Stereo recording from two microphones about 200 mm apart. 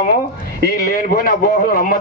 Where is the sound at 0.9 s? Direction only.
45° left (ahead or behind).